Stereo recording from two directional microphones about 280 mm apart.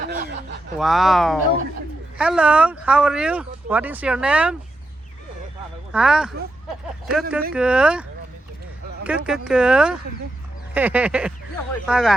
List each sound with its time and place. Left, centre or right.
0.0 s chuckle: right
0.8 s speech: centre
5.9 s speech: centre
9.0 s speech: centre